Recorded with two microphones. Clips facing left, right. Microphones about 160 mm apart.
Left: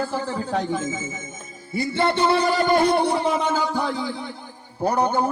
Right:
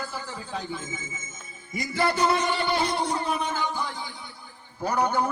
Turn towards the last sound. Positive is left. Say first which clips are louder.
# left 4 dB
turn(degrees=30)  # may be behind; listen again after turning